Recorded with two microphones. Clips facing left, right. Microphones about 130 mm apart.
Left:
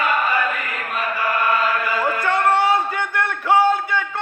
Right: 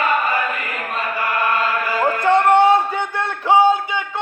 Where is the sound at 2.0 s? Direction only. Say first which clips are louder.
Right 6 dB; 25° right (ahead or behind).